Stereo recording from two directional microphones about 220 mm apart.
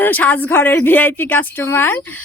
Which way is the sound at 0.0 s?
10° left (ahead or behind).